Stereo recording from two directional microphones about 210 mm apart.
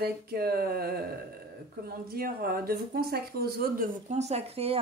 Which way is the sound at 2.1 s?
45° right (ahead or behind).